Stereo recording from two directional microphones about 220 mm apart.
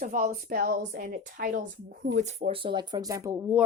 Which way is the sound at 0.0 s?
35° right (ahead or behind).